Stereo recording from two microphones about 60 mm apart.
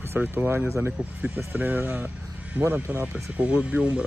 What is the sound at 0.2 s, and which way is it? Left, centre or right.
Speech, right.